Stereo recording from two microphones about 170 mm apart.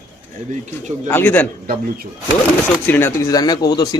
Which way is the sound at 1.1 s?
10° left (ahead or behind).